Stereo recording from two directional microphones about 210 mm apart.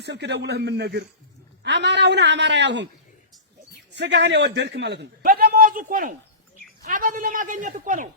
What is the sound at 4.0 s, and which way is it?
A man's voice, 55° right (ahead or behind).